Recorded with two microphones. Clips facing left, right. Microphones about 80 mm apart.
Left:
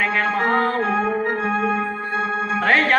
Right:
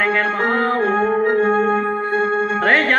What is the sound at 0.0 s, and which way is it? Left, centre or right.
Music, right.